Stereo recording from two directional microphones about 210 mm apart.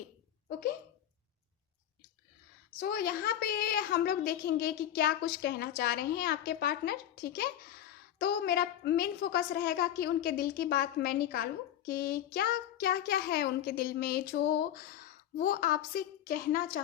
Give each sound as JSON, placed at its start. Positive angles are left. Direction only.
{"t": 2.7, "sound": "a woman's voice", "side_deg": 45}